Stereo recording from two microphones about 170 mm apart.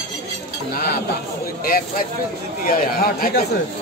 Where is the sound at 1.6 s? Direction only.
60° left (ahead or behind).